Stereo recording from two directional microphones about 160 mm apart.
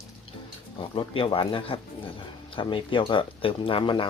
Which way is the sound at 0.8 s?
35° left (ahead or behind).